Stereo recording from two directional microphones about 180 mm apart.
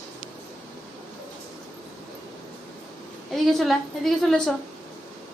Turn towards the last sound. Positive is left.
turn(degrees=0)  # may be behind; listen again after turning